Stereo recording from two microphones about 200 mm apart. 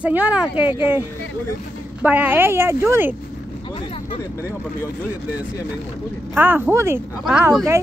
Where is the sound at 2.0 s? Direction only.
10° right (ahead or behind).